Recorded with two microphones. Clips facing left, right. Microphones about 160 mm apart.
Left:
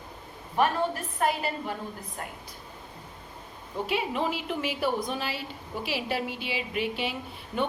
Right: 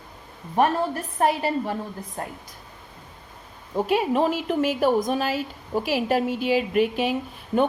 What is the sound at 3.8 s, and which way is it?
A woman's voice, 45° right (ahead or behind).